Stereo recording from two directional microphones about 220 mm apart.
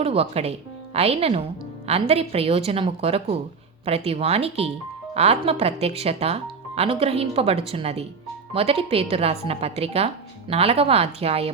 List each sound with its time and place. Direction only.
0.0 s speech: 25° right (ahead or behind)